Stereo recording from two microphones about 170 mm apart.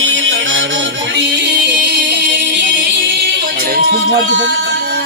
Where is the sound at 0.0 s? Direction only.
90° right.